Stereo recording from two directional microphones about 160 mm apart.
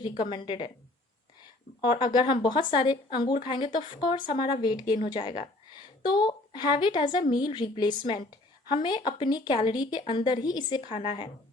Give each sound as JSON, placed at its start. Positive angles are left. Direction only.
{"t": 0.2, "sound": "a woman's voice", "side_deg": 30}
{"t": 1.8, "sound": "a woman's voice", "side_deg": 30}
{"t": 6.1, "sound": "a woman's voice", "side_deg": 25}
{"t": 10.8, "sound": "a woman's voice", "side_deg": 40}